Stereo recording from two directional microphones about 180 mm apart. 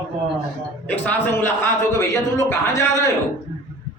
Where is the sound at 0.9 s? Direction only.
10° left (ahead or behind).